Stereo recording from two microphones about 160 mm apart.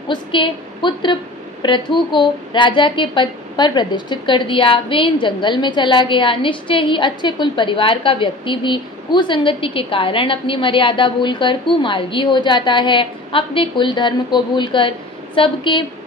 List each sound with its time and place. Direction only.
0.1 s a woman's voice: 30° left (ahead or behind)